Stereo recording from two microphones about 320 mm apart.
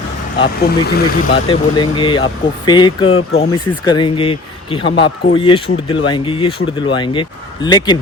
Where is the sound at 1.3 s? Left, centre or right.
Centre.